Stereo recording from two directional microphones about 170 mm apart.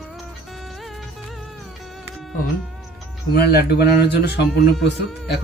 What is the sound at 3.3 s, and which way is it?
Speech, 70° left (ahead or behind).